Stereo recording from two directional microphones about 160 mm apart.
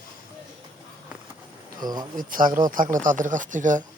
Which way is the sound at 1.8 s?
25° right (ahead or behind).